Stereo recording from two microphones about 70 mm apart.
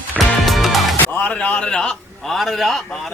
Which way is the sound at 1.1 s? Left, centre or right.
Left.